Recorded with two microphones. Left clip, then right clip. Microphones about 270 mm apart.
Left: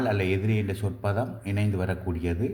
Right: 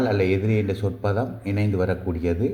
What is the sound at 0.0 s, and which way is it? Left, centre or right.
A man's voice, centre.